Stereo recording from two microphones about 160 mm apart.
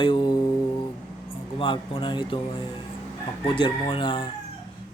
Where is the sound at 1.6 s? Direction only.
30° left (ahead or behind).